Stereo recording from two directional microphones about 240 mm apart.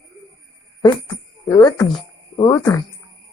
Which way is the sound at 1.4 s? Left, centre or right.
Centre.